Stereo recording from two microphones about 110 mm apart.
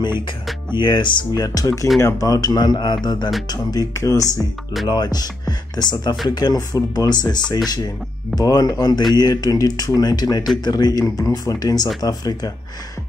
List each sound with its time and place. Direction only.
0.7 s speech: 45° left (ahead or behind); by 4.3 s 30° left (ahead or behind)
4.8 s speech: 40° left (ahead or behind)